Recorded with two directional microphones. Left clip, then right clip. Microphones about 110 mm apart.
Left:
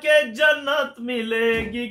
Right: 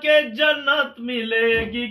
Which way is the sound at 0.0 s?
45° left (ahead or behind).